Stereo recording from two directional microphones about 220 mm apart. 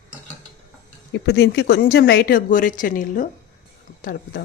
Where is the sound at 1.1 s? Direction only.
50° left (ahead or behind).